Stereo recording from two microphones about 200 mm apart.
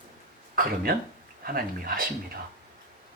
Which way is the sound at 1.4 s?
45° right (ahead or behind).